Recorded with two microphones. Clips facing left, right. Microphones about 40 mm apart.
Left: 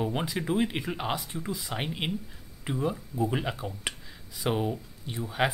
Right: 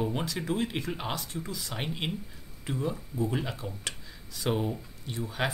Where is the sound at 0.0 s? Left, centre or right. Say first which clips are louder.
Left 1 dB; centre.